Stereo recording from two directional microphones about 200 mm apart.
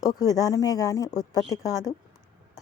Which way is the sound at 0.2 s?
15° left (ahead or behind).